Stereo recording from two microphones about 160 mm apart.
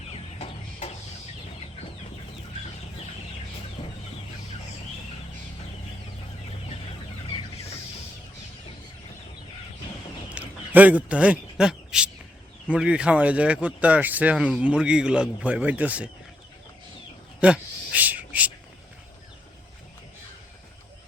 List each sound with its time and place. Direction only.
0.1 s chicken: 40° left (ahead or behind)
10.3 s speech: 10° right (ahead or behind)
17.4 s a sound: 10° right (ahead or behind)